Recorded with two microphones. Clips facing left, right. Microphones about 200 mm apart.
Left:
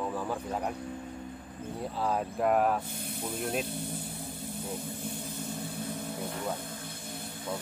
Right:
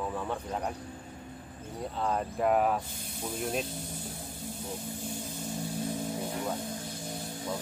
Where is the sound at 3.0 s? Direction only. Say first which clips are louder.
Left 1 dB; 55° left (ahead or behind).